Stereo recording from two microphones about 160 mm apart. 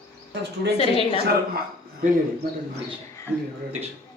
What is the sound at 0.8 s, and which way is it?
Speech, 35° left (ahead or behind).